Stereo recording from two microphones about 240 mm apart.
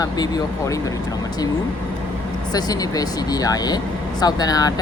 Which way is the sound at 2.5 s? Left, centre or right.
Centre.